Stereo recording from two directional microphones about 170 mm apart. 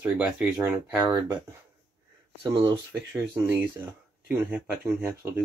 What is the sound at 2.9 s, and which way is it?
Speech, 10° right (ahead or behind).